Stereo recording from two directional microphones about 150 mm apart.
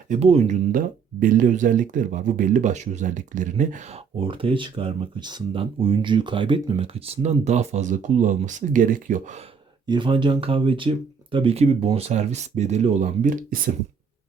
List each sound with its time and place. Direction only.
0.1 s speech: 45° right (ahead or behind)
4.2 s speech: 35° right (ahead or behind); by 9.2 s 65° right (ahead or behind)
9.8 s speech: 30° right (ahead or behind); by 13.6 s 60° right (ahead or behind)